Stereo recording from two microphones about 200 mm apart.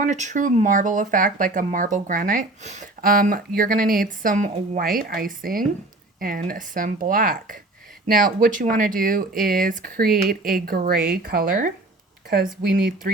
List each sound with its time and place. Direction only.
0.0 s speech: 40° right (ahead or behind)
12.7 s speech: 50° right (ahead or behind)